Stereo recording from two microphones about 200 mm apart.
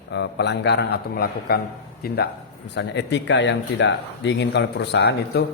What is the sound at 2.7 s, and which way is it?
A man's voice, 60° left (ahead or behind).